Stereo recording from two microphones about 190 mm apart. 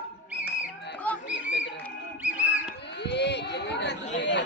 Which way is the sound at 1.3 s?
70° left (ahead or behind).